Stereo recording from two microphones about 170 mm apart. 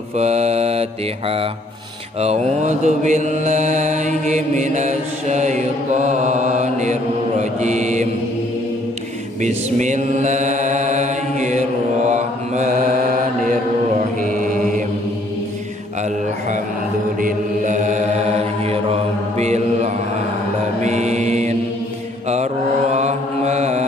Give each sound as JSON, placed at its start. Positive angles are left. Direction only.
{"t": 0.2, "sound": "mantra", "side_deg": -40}
{"t": 2.1, "sound": "mantra", "side_deg": -40}
{"t": 9.4, "sound": "mantra", "side_deg": -45}
{"t": 13.9, "sound": "mantra", "side_deg": -50}
{"t": 17.2, "sound": "mantra", "side_deg": -45}
{"t": 22.9, "sound": "mantra", "side_deg": -40}